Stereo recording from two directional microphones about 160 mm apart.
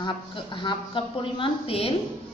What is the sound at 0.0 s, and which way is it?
A woman's voice, 30° left (ahead or behind).